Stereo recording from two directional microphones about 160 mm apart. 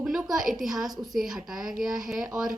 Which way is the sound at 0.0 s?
5° right (ahead or behind).